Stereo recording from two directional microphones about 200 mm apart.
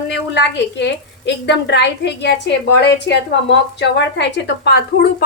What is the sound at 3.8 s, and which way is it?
A woman's voice, 60° left (ahead or behind).